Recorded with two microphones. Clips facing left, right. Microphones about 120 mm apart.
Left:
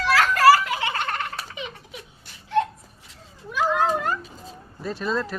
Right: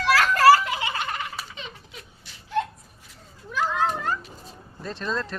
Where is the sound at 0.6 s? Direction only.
20° right (ahead or behind).